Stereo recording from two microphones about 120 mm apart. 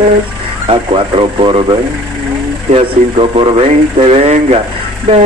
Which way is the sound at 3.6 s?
60° right (ahead or behind).